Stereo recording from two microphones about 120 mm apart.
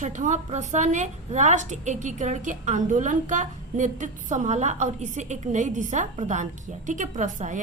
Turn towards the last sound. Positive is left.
turn(degrees=-90)